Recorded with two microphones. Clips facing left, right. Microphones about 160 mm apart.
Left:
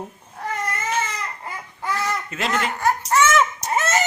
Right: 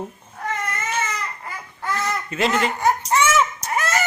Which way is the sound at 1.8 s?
10° left (ahead or behind).